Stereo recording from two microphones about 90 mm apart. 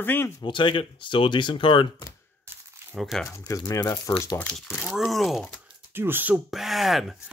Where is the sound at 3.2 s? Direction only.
35° left (ahead or behind).